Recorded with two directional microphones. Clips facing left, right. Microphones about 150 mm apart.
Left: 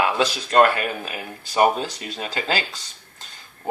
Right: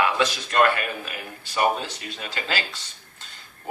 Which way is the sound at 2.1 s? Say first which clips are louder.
Left 5 dB; 35° left (ahead or behind).